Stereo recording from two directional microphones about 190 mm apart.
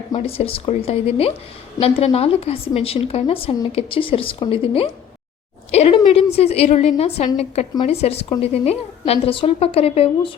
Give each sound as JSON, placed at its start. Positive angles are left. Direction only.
{"t": 0.2, "sound": "a woman's voice", "side_deg": 30}